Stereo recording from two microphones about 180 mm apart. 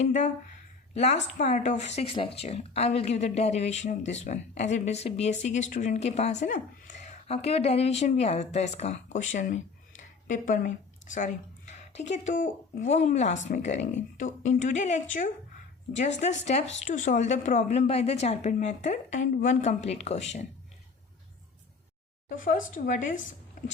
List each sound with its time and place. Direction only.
0.0 s a woman's voice: 40° left (ahead or behind)
22.3 s a woman's voice: 50° left (ahead or behind)
23.6 s a sound: 45° left (ahead or behind)